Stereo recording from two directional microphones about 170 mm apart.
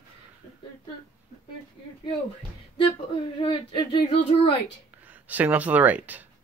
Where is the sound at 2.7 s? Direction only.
30° left (ahead or behind).